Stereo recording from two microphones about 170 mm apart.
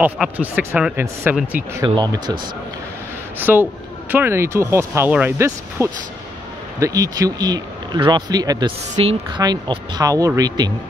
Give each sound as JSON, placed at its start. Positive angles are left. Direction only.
{"t": 0.0, "sound": "speech", "side_deg": -10}
{"t": 1.9, "sound": "speech", "side_deg": -25}
{"t": 3.3, "sound": "speech", "side_deg": -10}